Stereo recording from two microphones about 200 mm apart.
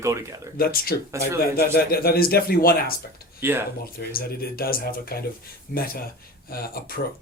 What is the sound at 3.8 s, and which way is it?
Speech, 50° left (ahead or behind).